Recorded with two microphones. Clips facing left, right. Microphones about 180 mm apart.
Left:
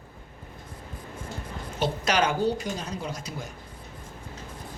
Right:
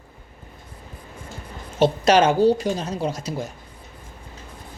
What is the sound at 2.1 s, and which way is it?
Speech, 25° right (ahead or behind).